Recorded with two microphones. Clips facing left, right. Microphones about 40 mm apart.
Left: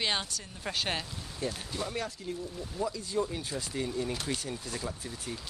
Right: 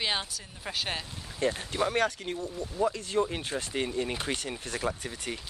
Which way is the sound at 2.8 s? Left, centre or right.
Right.